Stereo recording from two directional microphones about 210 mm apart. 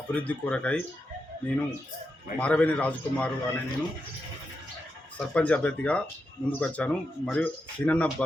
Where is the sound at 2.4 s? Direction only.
5° left (ahead or behind).